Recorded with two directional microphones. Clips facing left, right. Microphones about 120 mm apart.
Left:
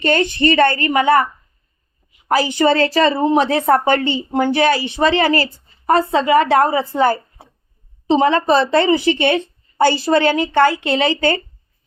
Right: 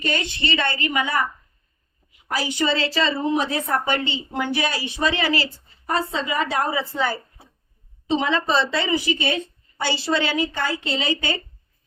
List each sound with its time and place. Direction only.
0.0 s a woman's voice: 60° left (ahead or behind)
2.3 s a woman's voice: 60° left (ahead or behind)
4.5 s a woman's voice: 65° left (ahead or behind)